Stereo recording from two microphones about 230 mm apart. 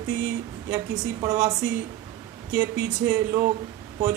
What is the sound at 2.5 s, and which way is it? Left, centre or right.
Speech, centre.